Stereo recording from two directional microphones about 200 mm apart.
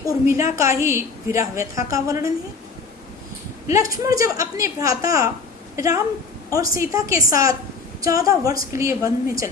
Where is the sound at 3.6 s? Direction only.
15° right (ahead or behind).